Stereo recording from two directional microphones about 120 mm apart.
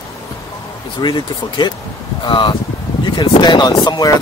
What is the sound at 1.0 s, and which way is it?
Speech, 40° left (ahead or behind).